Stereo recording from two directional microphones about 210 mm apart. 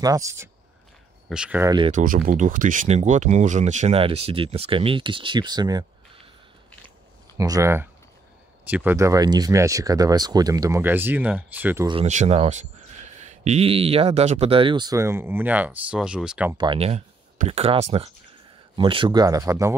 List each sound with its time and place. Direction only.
0.0 s speech: 15° right (ahead or behind)
1.9 s speech: 35° right (ahead or behind); by 5.9 s 20° right (ahead or behind)
7.3 s speech: 15° right (ahead or behind)
11.9 s speech: 30° right (ahead or behind); by 16.5 s 5° right (ahead or behind)
16.5 s speech: 25° right (ahead or behind)